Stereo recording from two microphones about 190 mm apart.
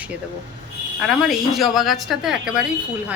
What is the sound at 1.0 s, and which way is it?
Speech, centre (ahead or behind).